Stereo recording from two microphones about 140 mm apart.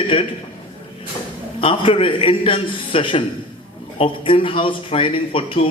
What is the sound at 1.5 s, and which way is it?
A man's voice, 40° left (ahead or behind).